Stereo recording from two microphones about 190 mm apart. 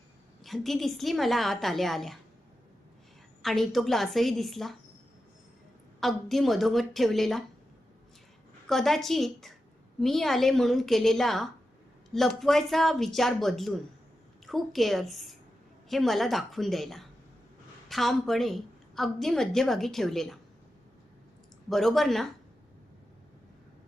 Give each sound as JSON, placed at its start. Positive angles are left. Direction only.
{"t": 0.4, "sound": "a woman's voice", "side_deg": 0}
{"t": 3.4, "sound": "a woman's voice", "side_deg": 0}
{"t": 6.0, "sound": "a woman's voice", "side_deg": 0}
{"t": 8.6, "sound": "a woman's voice", "side_deg": 0}
{"t": 21.7, "sound": "a woman's voice", "side_deg": 0}